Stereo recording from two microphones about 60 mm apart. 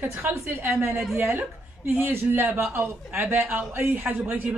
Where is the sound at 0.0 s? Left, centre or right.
Right.